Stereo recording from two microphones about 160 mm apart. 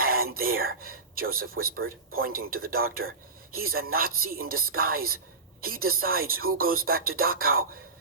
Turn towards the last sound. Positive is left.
turn(degrees=-65)  # may be behind; listen again after turning